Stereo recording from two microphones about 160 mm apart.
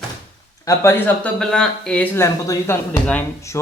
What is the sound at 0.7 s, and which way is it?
Speech, 15° left (ahead or behind).